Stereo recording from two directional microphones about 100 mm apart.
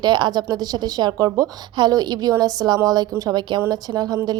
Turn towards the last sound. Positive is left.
turn(degrees=-40)  # may be behind; listen again after turning